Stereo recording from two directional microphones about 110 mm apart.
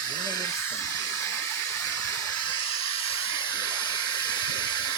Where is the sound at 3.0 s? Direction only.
55° left (ahead or behind); by 4.9 s 40° left (ahead or behind).